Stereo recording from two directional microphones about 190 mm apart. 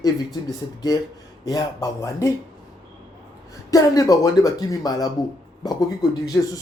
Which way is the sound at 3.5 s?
20° left (ahead or behind).